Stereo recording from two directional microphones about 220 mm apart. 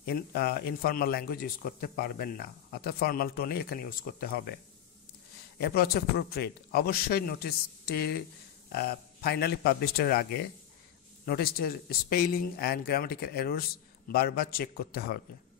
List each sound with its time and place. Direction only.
0.0 s speech: 45° left (ahead or behind)
5.6 s speech: 45° left (ahead or behind)